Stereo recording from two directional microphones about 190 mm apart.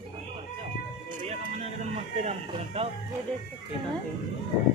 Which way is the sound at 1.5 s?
35° right (ahead or behind).